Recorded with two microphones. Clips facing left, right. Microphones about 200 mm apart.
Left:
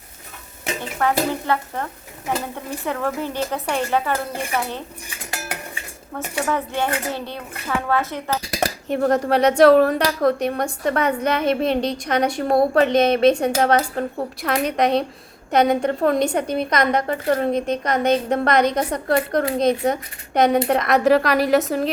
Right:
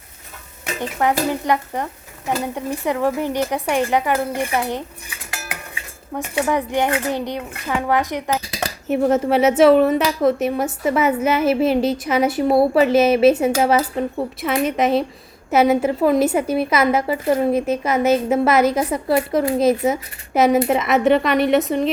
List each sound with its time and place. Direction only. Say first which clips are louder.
0.8 s speech: right 2 dB; 15° right (ahead or behind)
6.1 s speech: right 3 dB; 15° right (ahead or behind)
8.9 s a woman's voice: right 2 dB; 5° right (ahead or behind)